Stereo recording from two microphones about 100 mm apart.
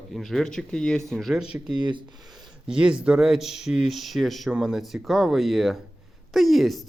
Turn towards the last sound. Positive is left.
turn(degrees=0)  # may be behind; listen again after turning